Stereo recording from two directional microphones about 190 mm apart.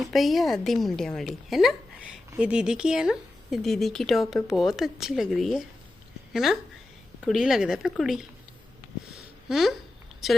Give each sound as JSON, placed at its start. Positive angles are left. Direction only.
{"t": 0.1, "sound": "speech", "side_deg": 0}
{"t": 9.1, "sound": "a sound", "side_deg": 0}
{"t": 10.2, "sound": "speech", "side_deg": 0}